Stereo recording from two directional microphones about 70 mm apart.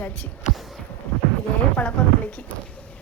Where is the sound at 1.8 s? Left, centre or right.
Centre.